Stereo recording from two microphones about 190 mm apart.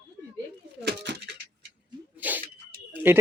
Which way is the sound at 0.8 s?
60° right (ahead or behind).